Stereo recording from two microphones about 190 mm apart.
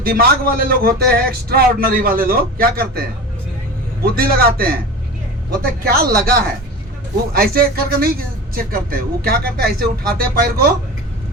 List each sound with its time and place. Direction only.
0.0 s a man's voice: 50° right (ahead or behind)
4.0 s a man's voice: 50° right (ahead or behind)
5.8 s a man's voice: 55° right (ahead or behind)